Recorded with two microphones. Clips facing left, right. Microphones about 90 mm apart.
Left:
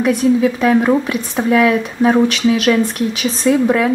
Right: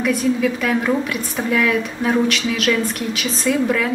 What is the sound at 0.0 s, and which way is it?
Speech, 25° left (ahead or behind).